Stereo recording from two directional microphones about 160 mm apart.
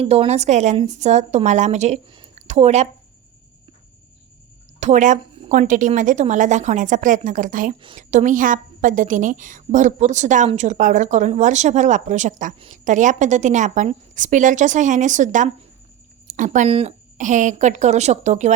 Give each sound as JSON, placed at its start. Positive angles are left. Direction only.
{"t": 0.0, "sound": "a woman's voice", "side_deg": -40}
{"t": 2.3, "sound": "a sound", "side_deg": -45}
{"t": 4.8, "sound": "a woman's voice", "side_deg": -50}